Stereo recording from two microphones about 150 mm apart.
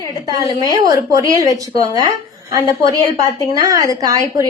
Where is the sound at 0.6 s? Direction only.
25° right (ahead or behind).